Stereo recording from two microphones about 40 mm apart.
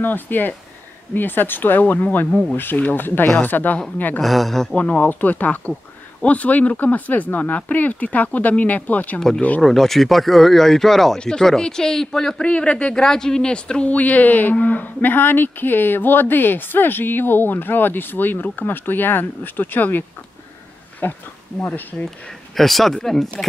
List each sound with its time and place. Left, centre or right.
0.0 s speech: left
3.4 s a woman's voice: left
4.2 s speech: centre
4.7 s speech: left
9.6 s speech: centre
12.4 s speech: left
12.9 s speech: centre
13.8 s speech: left
22.6 s speech: centre